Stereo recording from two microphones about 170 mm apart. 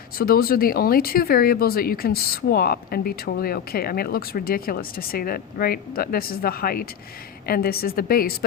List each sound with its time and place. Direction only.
0.2 s speech: 60° left (ahead or behind)